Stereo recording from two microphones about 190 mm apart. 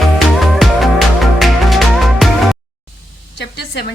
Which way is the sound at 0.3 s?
Centre (ahead or behind).